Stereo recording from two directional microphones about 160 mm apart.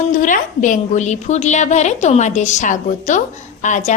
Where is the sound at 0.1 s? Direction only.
55° left (ahead or behind).